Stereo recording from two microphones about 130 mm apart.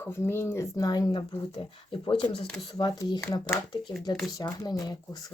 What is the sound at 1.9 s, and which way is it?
Speech, 45° left (ahead or behind).